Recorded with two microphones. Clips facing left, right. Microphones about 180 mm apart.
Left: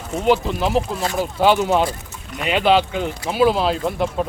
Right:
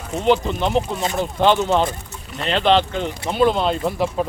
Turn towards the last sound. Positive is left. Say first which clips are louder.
# even
turn(degrees=0)  # may be behind; listen again after turning